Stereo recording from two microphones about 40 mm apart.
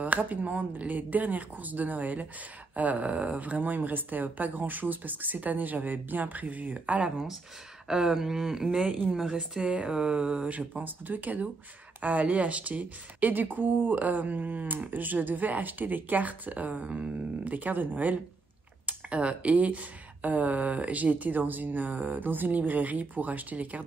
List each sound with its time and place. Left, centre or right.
0.0 s a woman's voice: right
7.9 s speech: centre
9.3 s mantra: centre
10.7 s a woman's voice: right
18.9 s a woman's voice: right